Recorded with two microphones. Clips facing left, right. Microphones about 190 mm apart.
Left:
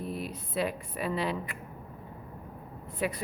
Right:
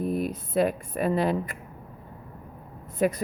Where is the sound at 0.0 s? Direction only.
50° right (ahead or behind).